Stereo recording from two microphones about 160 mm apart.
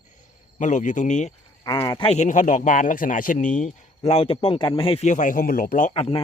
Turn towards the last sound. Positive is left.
turn(degrees=35)  # may be behind; listen again after turning